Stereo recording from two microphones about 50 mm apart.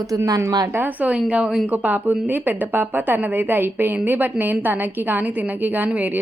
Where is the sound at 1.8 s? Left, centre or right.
Right.